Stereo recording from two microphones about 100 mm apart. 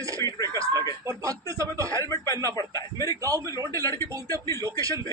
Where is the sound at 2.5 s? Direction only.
35° left (ahead or behind).